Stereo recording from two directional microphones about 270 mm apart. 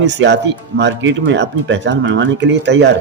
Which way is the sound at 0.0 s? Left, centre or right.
Right.